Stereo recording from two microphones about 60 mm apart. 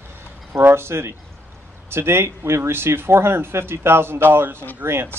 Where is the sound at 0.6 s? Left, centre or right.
Right.